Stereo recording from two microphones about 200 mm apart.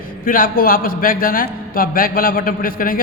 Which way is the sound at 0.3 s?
45° left (ahead or behind).